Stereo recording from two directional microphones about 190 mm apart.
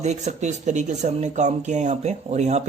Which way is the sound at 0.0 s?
35° right (ahead or behind).